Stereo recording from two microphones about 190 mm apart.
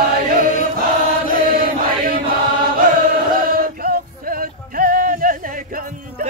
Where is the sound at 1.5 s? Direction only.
50° right (ahead or behind).